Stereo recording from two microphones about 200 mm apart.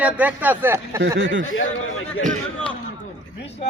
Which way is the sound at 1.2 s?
65° right (ahead or behind).